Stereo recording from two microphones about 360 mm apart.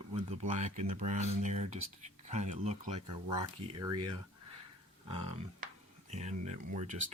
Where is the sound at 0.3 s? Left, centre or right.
Centre.